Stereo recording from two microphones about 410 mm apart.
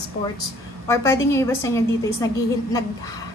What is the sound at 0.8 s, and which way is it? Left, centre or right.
A woman's voice, centre.